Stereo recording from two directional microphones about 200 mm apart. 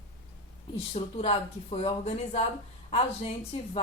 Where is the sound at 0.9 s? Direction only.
30° left (ahead or behind).